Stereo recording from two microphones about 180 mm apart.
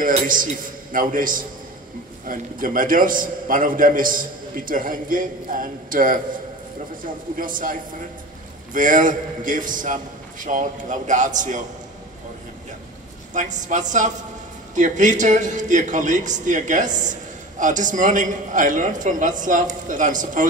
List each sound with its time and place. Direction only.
0.0 s a man's voice: 50° right (ahead or behind)
8.7 s a man's voice: 45° right (ahead or behind)
13.3 s a man's voice: 45° right (ahead or behind)